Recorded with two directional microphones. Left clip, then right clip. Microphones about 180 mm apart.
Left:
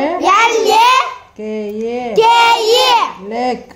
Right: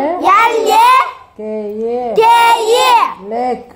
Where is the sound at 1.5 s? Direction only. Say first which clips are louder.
Right 2 dB; 30° left (ahead or behind).